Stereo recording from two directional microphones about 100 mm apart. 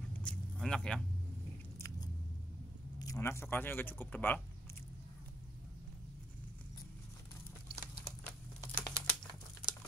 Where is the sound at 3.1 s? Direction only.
25° left (ahead or behind).